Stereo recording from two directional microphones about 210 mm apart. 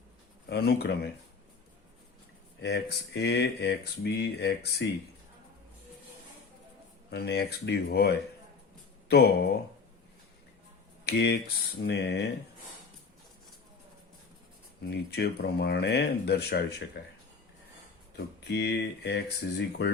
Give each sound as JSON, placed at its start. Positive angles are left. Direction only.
{"t": 0.5, "sound": "speech", "side_deg": 50}
{"t": 2.6, "sound": "speech", "side_deg": 50}
{"t": 7.1, "sound": "speech", "side_deg": 50}
{"t": 11.0, "sound": "speech", "side_deg": 50}
{"t": 14.8, "sound": "speech", "side_deg": 50}
{"t": 18.4, "sound": "speech", "side_deg": 50}